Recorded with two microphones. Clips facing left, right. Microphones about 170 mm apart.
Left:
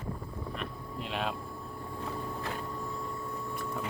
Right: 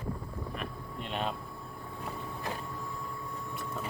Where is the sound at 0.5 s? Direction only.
Centre (ahead or behind).